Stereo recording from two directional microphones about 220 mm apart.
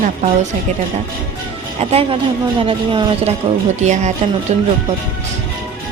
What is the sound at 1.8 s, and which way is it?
A woman's voice, 25° right (ahead or behind).